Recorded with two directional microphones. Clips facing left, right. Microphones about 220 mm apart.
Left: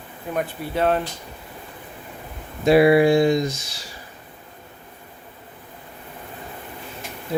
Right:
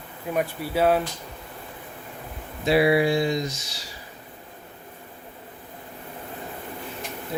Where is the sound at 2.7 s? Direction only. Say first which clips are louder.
Left 5 dB; 50° left (ahead or behind).